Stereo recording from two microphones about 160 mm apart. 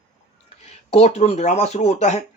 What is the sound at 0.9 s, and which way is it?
Speech, 40° left (ahead or behind).